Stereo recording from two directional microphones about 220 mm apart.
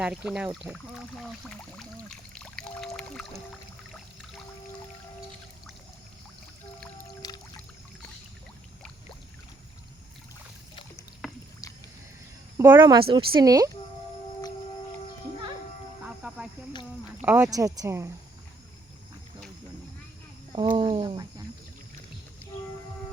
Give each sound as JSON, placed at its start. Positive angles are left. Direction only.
{"t": 0.0, "sound": "speech", "side_deg": -5}
{"t": 1.5, "sound": "music", "side_deg": 5}
{"t": 3.9, "sound": "pour", "side_deg": 0}
{"t": 7.1, "sound": "music", "side_deg": 15}
{"t": 11.2, "sound": "a sound", "side_deg": 0}
{"t": 11.6, "sound": "a sound", "side_deg": 15}
{"t": 12.5, "sound": "a sound", "side_deg": -10}
{"t": 12.8, "sound": "a woman's voice", "side_deg": -20}
{"t": 16.0, "sound": "music", "side_deg": -5}
{"t": 17.2, "sound": "speech", "side_deg": -10}
{"t": 20.7, "sound": "a woman's voice", "side_deg": -20}